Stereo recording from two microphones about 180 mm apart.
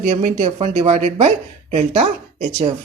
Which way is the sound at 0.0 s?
40° right (ahead or behind).